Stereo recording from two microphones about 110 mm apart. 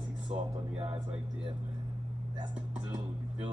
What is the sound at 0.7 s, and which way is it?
Speech, 55° right (ahead or behind).